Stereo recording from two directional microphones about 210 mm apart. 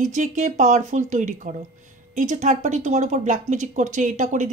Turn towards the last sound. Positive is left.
turn(degrees=-35)  # may be behind; listen again after turning